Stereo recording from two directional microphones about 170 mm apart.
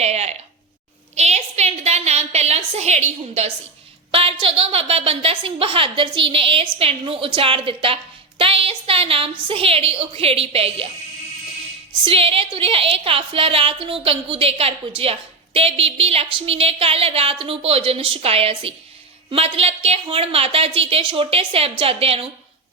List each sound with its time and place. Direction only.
0.0 s a sound: 40° right (ahead or behind)
4.1 s a woman's voice: 30° right (ahead or behind)
12.0 s a woman's voice: 35° right (ahead or behind)